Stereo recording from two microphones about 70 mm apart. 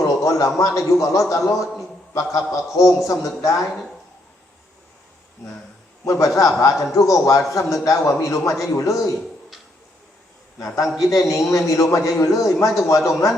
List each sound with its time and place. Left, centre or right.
0.0 s a man's voice: left
6.1 s a man's voice: left
11.0 s a man's voice: left